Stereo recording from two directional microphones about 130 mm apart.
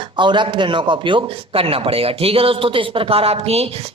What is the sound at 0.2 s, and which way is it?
A man's voice, 35° right (ahead or behind).